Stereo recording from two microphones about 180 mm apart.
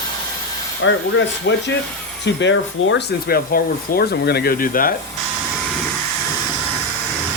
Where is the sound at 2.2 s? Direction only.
90° left; by 4.9 s 50° left (ahead or behind).